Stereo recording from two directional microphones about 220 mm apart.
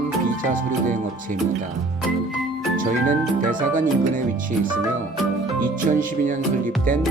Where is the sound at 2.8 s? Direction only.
40° right (ahead or behind).